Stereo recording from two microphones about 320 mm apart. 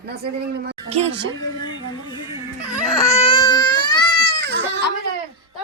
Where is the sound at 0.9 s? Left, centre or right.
Centre.